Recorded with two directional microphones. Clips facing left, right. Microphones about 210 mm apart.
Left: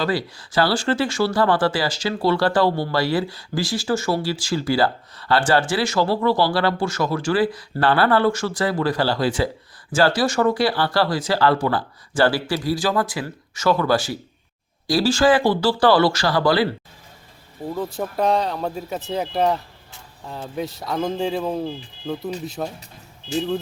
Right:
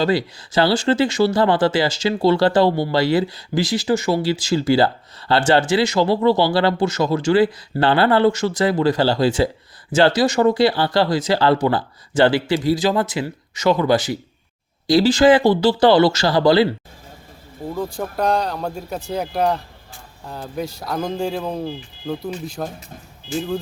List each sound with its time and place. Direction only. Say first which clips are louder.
0.0 s speech: right 4 dB; 20° right (ahead or behind)
17.7 s speech: even; 5° left (ahead or behind)